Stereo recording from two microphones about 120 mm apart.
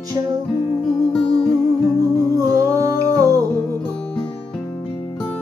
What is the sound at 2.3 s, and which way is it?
Music, 30° right (ahead or behind).